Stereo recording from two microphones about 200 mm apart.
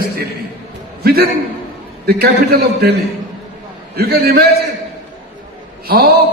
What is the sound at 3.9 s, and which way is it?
Speech, 50° right (ahead or behind).